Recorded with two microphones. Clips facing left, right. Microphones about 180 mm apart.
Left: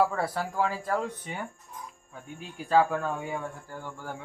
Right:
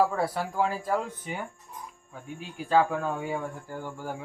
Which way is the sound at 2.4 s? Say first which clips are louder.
Even; centre (ahead or behind).